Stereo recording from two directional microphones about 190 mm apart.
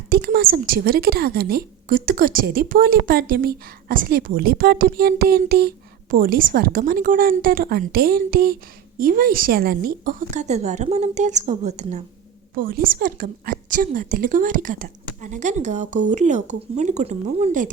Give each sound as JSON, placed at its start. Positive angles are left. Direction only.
{"t": 0.1, "sound": "a woman's voice", "side_deg": -55}
{"t": 12.5, "sound": "a woman's voice", "side_deg": -45}